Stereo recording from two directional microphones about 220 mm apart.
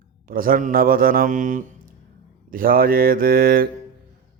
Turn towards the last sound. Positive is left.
turn(degrees=-40)  # may be behind; listen again after turning